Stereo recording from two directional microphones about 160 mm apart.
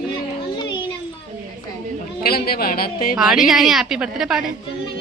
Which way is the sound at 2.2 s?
70° left (ahead or behind).